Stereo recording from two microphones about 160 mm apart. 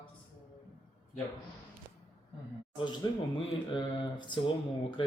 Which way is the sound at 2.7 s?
30° left (ahead or behind).